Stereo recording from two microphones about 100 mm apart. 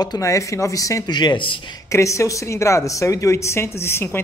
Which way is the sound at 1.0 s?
45° left (ahead or behind).